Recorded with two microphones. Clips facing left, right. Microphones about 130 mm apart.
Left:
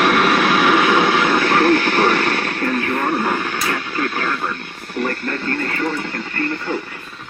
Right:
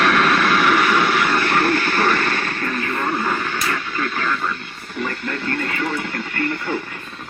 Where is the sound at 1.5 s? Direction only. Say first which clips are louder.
Left 4 dB; 85° left.